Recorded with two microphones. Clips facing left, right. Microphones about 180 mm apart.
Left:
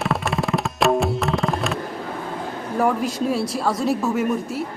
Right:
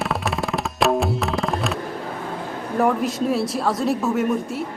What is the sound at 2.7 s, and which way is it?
A woman's voice, centre (ahead or behind).